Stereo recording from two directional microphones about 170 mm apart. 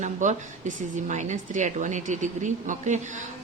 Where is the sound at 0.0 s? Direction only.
45° right (ahead or behind).